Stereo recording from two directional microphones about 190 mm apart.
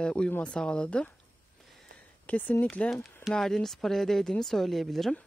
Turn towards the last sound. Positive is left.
turn(degrees=0)  # may be behind; listen again after turning